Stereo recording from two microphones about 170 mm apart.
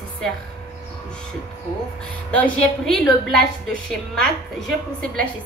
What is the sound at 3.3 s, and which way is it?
Speech, 65° right (ahead or behind).